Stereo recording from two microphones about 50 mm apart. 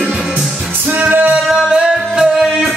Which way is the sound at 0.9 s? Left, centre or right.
Right.